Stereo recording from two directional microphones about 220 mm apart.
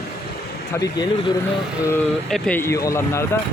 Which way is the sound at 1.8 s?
5° left (ahead or behind).